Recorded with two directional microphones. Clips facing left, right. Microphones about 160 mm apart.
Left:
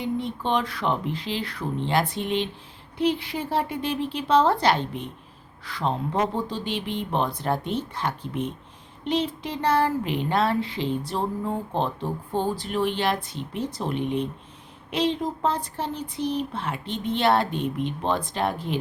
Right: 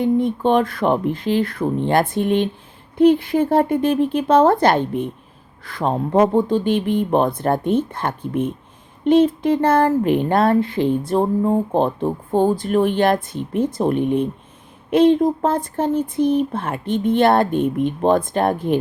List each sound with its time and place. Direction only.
0.0 s speech: 50° right (ahead or behind)